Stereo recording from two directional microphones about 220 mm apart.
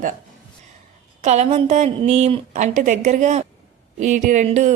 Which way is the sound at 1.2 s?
30° right (ahead or behind).